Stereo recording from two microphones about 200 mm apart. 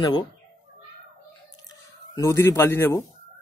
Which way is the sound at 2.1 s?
15° left (ahead or behind).